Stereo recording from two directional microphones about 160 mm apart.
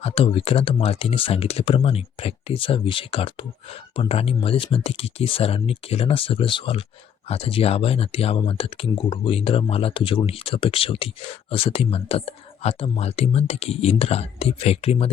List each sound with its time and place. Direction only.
0.0 s speech: 35° left (ahead or behind)